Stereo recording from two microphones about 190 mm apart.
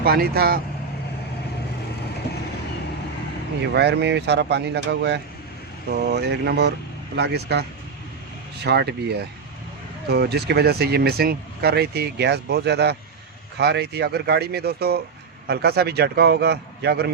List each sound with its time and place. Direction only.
0.0 s speech: 55° right (ahead or behind)
3.6 s speech: 65° right (ahead or behind)
8.6 s speech: 60° right (ahead or behind)